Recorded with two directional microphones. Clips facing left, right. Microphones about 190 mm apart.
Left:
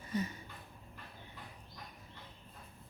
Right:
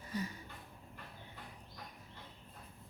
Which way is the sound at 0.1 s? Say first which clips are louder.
Left 4 dB; 20° left (ahead or behind).